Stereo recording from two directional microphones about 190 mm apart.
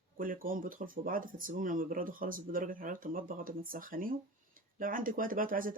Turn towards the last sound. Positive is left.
turn(degrees=-45)  # may be behind; listen again after turning